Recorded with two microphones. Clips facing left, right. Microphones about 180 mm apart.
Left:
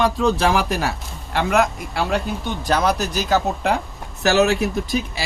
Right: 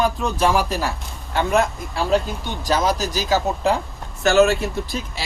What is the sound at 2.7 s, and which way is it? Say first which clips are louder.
Speech: even; 60° left (ahead or behind).